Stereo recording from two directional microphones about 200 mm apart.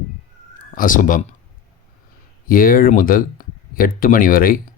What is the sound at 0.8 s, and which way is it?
Speech, 40° left (ahead or behind).